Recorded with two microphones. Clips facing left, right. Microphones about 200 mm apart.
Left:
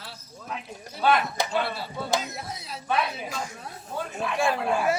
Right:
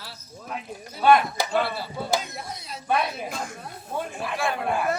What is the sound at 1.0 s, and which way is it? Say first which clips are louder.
Speech: right 4 dB; 55° right (ahead or behind).